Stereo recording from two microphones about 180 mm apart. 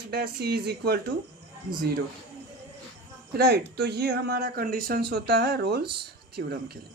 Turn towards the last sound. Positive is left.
turn(degrees=-60)  # may be behind; listen again after turning